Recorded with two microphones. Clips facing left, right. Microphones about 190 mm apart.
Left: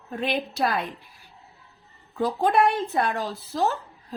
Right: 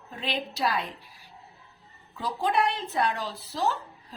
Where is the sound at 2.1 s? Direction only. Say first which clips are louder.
Left 5 dB; 50° left (ahead or behind).